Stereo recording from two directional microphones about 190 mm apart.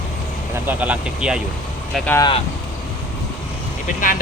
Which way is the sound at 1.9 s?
5° left (ahead or behind).